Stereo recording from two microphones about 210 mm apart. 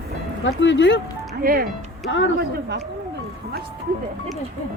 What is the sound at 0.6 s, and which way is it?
Speech, 60° left (ahead or behind).